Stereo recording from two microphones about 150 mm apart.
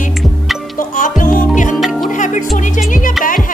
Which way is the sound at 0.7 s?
60° left (ahead or behind).